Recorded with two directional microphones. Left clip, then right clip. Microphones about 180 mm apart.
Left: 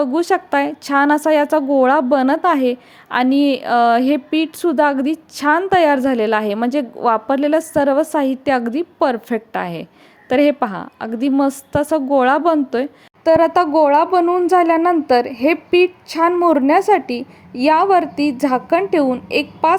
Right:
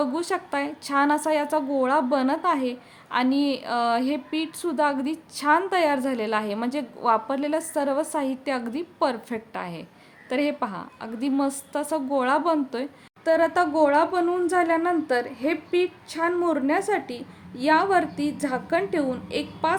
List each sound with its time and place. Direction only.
0.0 s a woman's voice: 35° left (ahead or behind)